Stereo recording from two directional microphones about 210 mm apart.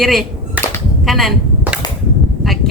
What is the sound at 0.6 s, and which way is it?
Cap gun, 5° right (ahead or behind).